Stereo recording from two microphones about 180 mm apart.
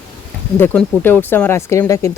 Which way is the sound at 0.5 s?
10° left (ahead or behind).